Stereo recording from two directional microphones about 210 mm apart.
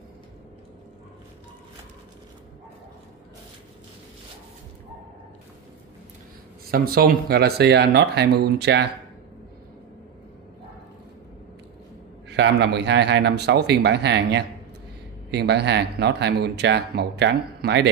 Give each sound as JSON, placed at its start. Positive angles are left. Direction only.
{"t": 6.7, "sound": "speech", "side_deg": -45}
{"t": 12.3, "sound": "speech", "side_deg": -55}